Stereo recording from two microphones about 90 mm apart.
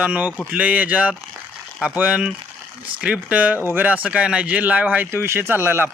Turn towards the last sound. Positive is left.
turn(degrees=-25)  # may be behind; listen again after turning